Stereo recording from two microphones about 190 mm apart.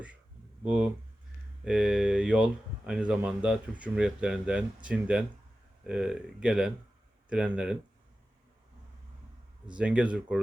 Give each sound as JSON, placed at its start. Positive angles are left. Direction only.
{"t": 0.6, "sound": "speech", "side_deg": -5}
{"t": 9.7, "sound": "speech", "side_deg": -5}